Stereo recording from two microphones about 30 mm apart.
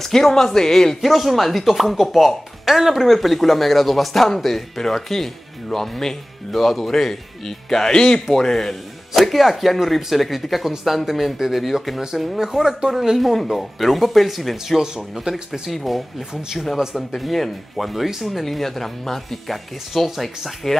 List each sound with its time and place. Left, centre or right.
0.0 s speech: centre
1.0 s speech: centre
6.5 s speech: centre
6.9 s speech: centre
7.9 s speech: left
9.1 s speech: centre
12.4 s speech: centre
13.2 s speech: centre
14.8 s speech: right
15.7 s speech: centre
16.7 s speech: centre
17.1 s speech: centre
18.4 s speech: centre